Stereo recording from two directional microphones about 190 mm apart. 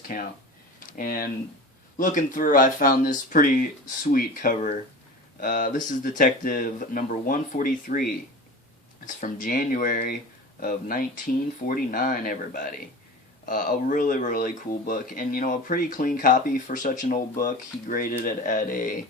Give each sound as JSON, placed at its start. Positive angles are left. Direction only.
{"t": 0.1, "sound": "speech", "side_deg": 45}